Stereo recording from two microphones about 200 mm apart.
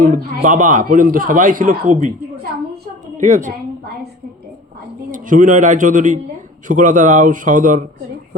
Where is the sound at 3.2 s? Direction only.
35° right (ahead or behind).